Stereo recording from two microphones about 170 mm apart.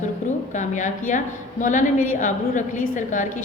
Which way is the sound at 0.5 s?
50° left (ahead or behind).